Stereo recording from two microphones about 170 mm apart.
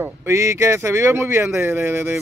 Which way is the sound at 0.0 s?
15° right (ahead or behind).